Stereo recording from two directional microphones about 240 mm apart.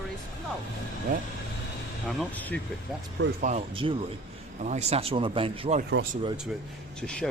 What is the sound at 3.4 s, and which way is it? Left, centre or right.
Speech, right.